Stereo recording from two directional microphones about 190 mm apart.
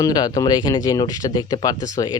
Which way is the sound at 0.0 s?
20° left (ahead or behind).